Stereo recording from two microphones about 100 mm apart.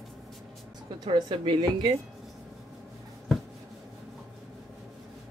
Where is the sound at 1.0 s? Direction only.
45° right (ahead or behind).